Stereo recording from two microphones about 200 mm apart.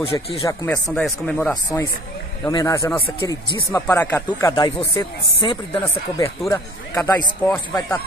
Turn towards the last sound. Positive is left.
turn(degrees=15)  # may be behind; listen again after turning